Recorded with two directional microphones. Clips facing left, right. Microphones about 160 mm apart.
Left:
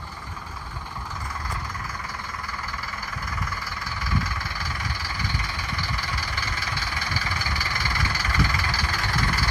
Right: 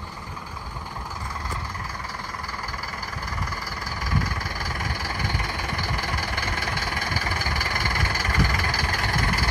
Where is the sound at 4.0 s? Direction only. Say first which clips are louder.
Right 1 dB; 45° right (ahead or behind).